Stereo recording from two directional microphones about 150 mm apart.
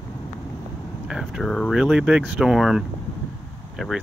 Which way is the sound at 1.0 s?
5° right (ahead or behind).